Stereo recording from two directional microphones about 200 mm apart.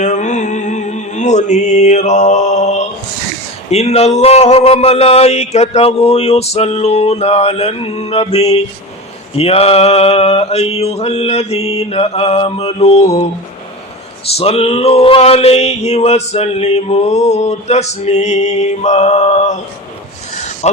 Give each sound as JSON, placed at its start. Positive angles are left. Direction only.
{"t": 0.0, "sound": "music", "side_deg": 35}
{"t": 3.7, "sound": "male singing", "side_deg": 30}
{"t": 14.3, "sound": "male singing", "side_deg": 30}